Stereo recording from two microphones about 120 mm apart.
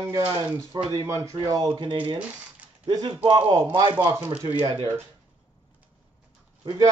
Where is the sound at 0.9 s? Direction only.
30° right (ahead or behind); by 2.2 s 45° right (ahead or behind).